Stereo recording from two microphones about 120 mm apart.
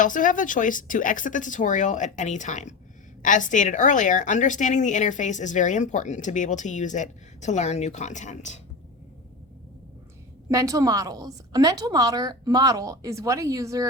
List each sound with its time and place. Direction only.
0.0 s a woman's voice: 90° left
10.5 s a woman's voice: 25° right (ahead or behind)